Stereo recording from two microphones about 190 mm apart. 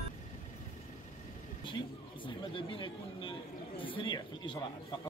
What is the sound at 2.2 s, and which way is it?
Speech, 25° left (ahead or behind).